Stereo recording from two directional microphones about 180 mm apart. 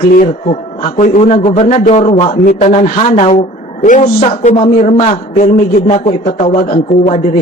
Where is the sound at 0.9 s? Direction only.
40° left (ahead or behind).